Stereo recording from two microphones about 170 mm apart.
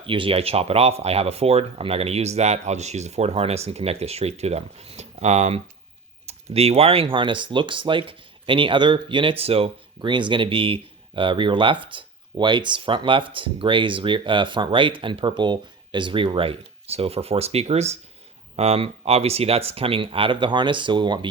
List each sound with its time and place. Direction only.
0.0 s speech: 30° right (ahead or behind)